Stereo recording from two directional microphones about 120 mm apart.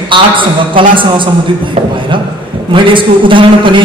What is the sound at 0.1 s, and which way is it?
Speech, 45° right (ahead or behind).